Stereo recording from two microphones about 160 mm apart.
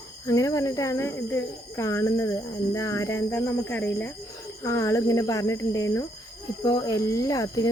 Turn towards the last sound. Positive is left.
turn(degrees=20)  # may be behind; listen again after turning